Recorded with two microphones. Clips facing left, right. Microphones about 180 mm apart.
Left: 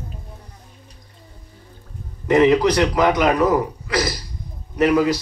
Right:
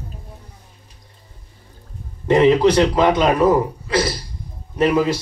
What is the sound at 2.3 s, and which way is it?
Speech, 25° right (ahead or behind).